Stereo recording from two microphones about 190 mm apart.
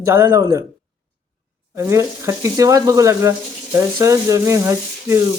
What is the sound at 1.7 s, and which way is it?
Speech, 15° right (ahead or behind).